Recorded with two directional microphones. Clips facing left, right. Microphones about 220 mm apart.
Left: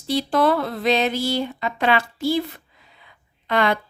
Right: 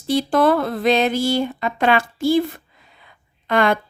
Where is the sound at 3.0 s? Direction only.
50° right (ahead or behind).